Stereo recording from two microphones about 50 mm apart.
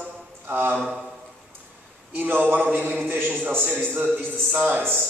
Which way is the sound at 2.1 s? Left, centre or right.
Right.